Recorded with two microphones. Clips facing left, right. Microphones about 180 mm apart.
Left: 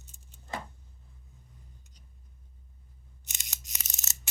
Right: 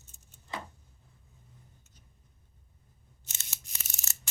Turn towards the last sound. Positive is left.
turn(degrees=20)  # may be behind; listen again after turning